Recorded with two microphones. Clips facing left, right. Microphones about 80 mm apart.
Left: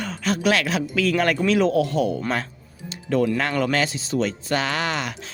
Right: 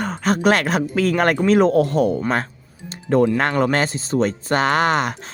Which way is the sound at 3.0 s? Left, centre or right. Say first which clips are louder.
Right 4 dB; right.